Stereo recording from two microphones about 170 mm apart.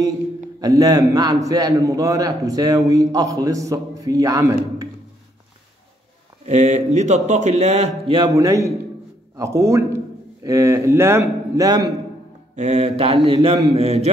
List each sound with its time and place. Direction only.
0.6 s a man's voice: 20° right (ahead or behind)
6.4 s speech: 45° right (ahead or behind)
8.1 s a man's voice: 25° right (ahead or behind)
12.5 s speech: 40° right (ahead or behind)